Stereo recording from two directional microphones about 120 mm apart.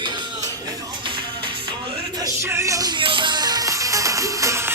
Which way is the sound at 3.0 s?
45° right (ahead or behind).